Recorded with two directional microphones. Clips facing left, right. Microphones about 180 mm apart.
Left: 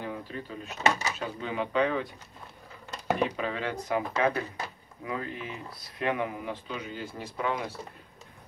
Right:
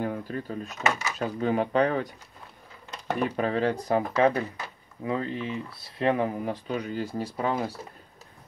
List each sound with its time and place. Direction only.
0.0 s speech: 45° right (ahead or behind)
0.8 s speech: 30° left (ahead or behind)
1.1 s speech: 45° right (ahead or behind)
3.3 s speech: 40° right (ahead or behind)